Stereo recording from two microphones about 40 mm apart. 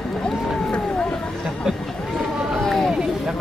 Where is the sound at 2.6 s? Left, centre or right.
Centre.